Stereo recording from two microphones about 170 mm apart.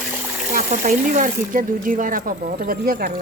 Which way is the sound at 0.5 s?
50° right (ahead or behind).